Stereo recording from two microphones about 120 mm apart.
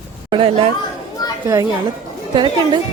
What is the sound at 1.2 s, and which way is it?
Chatter, 35° left (ahead or behind).